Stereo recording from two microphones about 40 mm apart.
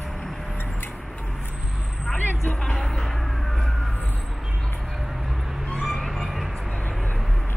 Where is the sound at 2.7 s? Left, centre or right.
Centre.